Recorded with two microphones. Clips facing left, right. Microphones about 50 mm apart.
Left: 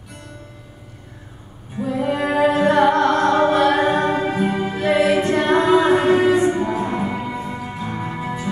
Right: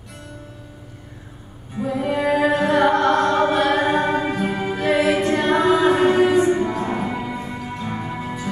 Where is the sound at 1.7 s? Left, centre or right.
Centre.